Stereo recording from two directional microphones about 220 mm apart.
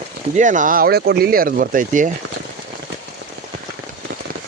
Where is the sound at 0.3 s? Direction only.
35° right (ahead or behind).